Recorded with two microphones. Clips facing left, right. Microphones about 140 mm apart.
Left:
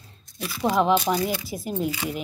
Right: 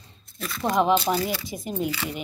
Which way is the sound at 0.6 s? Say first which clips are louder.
Left 1 dB; 5° left (ahead or behind).